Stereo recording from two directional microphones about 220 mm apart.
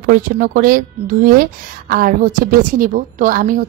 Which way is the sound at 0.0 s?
40° right (ahead or behind).